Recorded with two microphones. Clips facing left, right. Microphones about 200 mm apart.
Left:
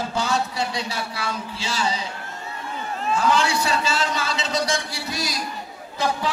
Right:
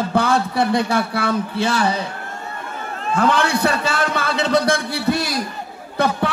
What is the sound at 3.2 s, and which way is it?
A man's voice, 60° right (ahead or behind).